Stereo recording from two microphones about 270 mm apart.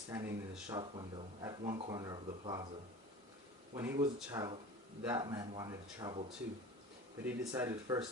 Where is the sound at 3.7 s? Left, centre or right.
Centre.